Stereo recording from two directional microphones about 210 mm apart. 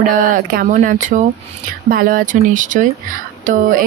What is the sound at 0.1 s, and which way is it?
Speech, 40° right (ahead or behind).